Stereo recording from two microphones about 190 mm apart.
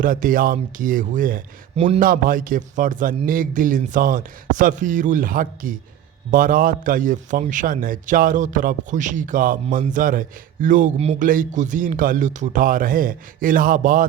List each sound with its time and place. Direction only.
0.0 s a man's voice: 45° right (ahead or behind)